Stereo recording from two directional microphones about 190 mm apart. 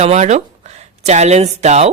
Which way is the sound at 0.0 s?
35° right (ahead or behind).